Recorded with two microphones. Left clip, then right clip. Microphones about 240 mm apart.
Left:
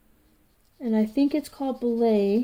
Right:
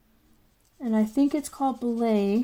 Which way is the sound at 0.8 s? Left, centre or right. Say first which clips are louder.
Left 1 dB; centre.